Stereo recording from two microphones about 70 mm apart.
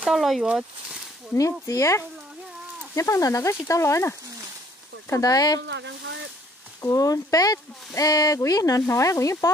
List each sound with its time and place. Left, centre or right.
0.1 s speech: centre
1.3 s speech: left
5.1 s speech: left
6.8 s speech: left
8.8 s speech: left